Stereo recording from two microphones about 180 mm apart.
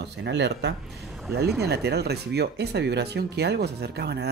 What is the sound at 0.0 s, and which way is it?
Speech, 70° right (ahead or behind).